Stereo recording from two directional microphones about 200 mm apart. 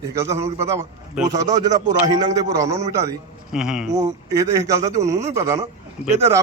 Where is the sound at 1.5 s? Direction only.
20° right (ahead or behind).